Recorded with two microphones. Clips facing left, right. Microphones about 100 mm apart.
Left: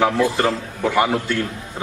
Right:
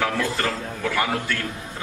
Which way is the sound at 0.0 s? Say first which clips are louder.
Left 6 dB; 20° left (ahead or behind).